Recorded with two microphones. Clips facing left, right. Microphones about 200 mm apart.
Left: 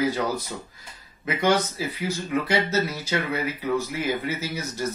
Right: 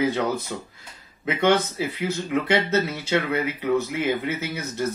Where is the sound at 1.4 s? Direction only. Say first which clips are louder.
Right 2 dB; 25° right (ahead or behind).